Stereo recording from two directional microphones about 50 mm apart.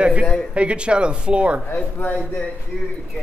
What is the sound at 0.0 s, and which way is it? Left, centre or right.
Speech, right.